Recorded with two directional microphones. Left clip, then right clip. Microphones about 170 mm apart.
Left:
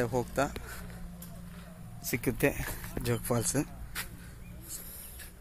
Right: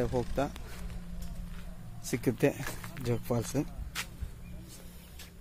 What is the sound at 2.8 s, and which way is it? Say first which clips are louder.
Speech: left 1 dB; 10° right (ahead or behind).